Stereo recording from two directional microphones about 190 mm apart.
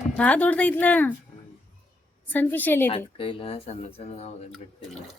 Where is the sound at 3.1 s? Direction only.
25° left (ahead or behind).